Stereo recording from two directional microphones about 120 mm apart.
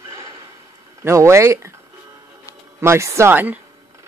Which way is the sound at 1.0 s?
25° right (ahead or behind).